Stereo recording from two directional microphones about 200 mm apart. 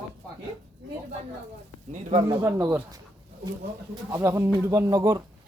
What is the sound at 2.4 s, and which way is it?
Speech, 10° right (ahead or behind).